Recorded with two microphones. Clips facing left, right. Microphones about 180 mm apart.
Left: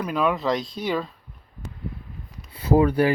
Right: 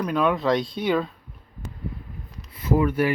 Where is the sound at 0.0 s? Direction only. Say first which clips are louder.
Right 1 dB; 5° left (ahead or behind).